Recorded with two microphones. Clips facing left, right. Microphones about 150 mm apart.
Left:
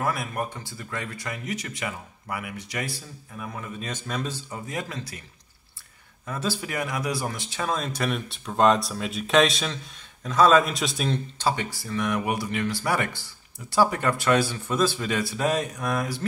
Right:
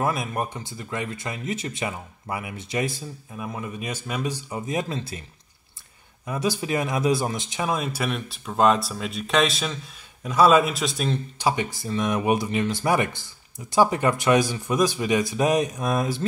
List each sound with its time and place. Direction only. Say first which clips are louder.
0.0 s speech: right 2 dB; 20° right (ahead or behind)
6.2 s a man's voice: right 4 dB; 15° right (ahead or behind); by 11.1 s centre (ahead or behind)
11.3 s speech: right 2 dB; 15° right (ahead or behind)